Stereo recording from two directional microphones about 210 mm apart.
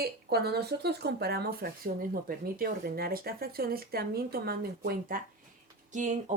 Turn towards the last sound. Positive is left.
turn(degrees=-35)  # may be behind; listen again after turning